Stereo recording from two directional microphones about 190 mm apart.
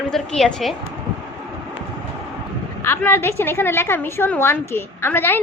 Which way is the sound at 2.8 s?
10° left (ahead or behind).